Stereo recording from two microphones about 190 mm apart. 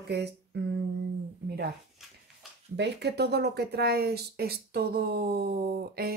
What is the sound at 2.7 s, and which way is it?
Speech, 65° right (ahead or behind).